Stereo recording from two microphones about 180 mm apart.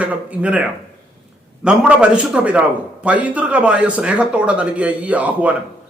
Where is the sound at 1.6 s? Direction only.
5° right (ahead or behind).